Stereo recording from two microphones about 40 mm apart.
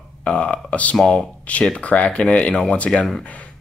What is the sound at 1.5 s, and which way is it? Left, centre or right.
Speech, left.